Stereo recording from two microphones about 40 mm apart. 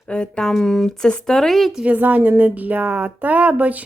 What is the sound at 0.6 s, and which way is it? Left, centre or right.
A woman's voice, centre.